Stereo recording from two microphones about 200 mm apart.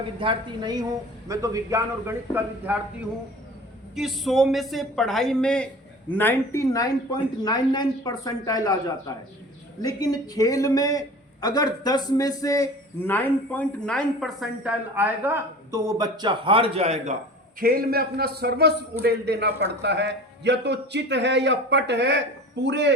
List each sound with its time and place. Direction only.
0.2 s a woman's voice: 25° right (ahead or behind)
3.9 s a man's voice: centre (ahead or behind); by 17.2 s 35° right (ahead or behind)
17.6 s a man's voice: 45° right (ahead or behind)